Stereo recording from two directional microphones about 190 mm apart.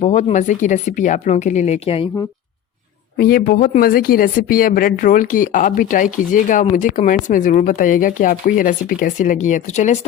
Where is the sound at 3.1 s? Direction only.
50° left (ahead or behind).